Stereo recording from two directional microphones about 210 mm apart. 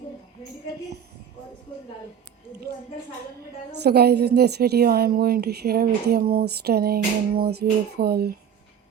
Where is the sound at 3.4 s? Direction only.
50° right (ahead or behind).